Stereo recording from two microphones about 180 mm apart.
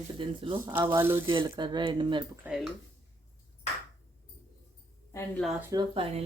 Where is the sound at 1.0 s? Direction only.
10° right (ahead or behind).